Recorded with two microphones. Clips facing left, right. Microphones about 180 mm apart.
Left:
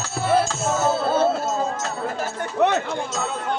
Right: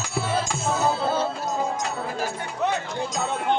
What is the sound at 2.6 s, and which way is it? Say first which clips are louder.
Speech: left 6 dB; 65° left (ahead or behind).